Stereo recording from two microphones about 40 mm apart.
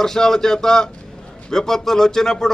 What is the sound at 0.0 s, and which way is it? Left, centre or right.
A man's voice, centre.